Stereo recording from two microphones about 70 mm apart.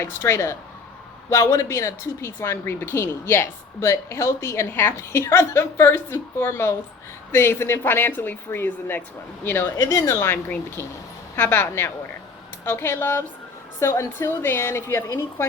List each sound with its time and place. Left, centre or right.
0.0 s a woman's voice: left